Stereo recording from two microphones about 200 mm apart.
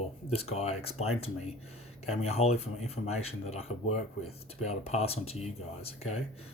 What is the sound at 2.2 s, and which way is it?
Speech, 30° left (ahead or behind).